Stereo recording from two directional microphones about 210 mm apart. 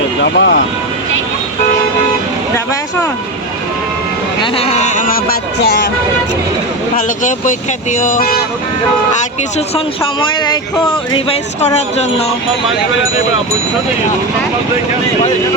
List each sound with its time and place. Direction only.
0.2 s speech: 55° left (ahead or behind)
4.5 s a sound: 30° left (ahead or behind)
7.2 s speech: 35° left (ahead or behind)
9.6 s speech: 25° left (ahead or behind)